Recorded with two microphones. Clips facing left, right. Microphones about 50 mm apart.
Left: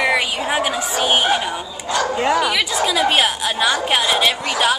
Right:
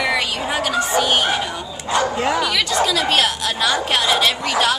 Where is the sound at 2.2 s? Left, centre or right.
Centre.